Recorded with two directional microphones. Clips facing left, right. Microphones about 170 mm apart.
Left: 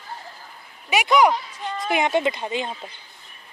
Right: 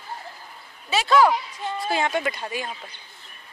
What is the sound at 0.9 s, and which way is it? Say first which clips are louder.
Speech: left 1 dB; 15° left (ahead or behind).